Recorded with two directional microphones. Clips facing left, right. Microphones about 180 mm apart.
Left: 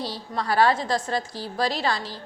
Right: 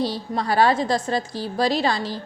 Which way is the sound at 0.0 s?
20° right (ahead or behind).